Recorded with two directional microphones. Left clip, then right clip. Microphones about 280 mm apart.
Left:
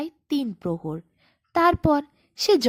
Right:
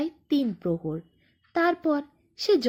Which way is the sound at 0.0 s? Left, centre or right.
Left.